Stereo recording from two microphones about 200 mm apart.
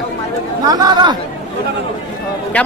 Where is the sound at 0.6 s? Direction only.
20° right (ahead or behind).